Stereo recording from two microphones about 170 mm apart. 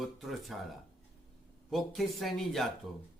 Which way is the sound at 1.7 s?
Centre (ahead or behind).